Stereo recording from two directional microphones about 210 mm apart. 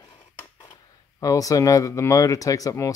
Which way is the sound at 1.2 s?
15° left (ahead or behind).